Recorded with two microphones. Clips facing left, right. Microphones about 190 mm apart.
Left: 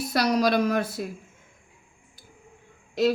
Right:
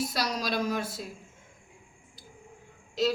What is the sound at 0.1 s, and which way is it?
Speech, 60° left (ahead or behind).